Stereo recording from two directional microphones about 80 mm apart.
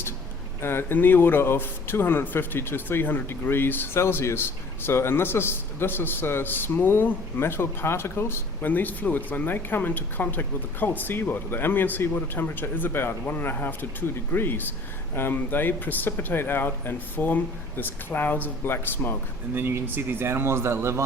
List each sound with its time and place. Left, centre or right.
0.6 s speech: left
19.5 s speech: right